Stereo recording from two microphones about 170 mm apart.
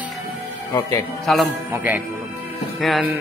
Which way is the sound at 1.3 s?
Centre (ahead or behind).